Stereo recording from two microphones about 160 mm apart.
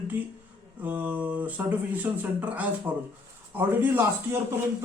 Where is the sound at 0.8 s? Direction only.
10° right (ahead or behind).